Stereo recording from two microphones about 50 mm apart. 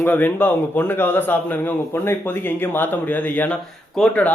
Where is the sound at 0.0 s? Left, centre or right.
Left.